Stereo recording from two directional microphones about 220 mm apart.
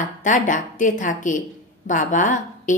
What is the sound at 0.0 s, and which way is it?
A woman's voice, 35° left (ahead or behind).